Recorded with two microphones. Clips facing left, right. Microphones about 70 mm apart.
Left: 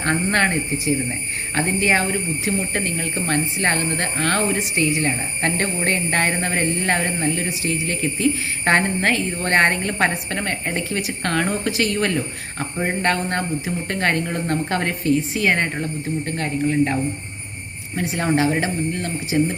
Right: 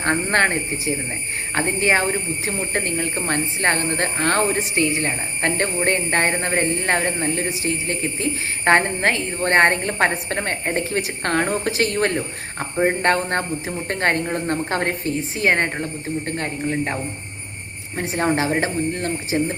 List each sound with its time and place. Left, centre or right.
0.0 s speech: right